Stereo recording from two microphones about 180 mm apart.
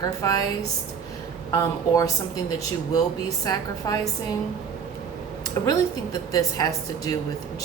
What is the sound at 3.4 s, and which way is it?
Speech, 20° left (ahead or behind).